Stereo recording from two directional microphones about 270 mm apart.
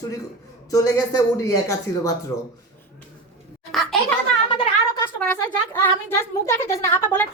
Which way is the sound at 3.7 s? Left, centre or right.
Centre.